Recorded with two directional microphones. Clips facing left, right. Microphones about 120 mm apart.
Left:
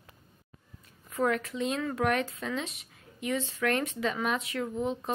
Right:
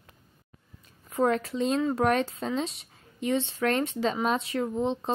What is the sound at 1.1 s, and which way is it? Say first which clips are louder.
A woman's voice: right 4 dB; 30° right (ahead or behind).